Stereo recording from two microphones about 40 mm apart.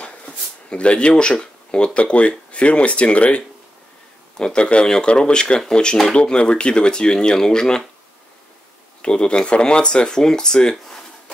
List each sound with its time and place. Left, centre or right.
0.0 s speech: left
9.0 s speech: left